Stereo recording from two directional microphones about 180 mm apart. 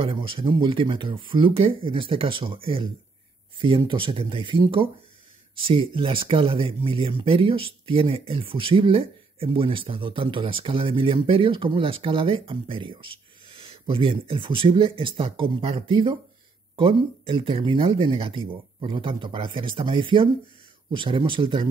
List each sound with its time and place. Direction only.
0.0 s speech: 30° right (ahead or behind)